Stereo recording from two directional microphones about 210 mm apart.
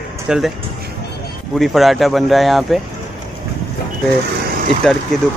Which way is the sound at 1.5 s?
Centre (ahead or behind).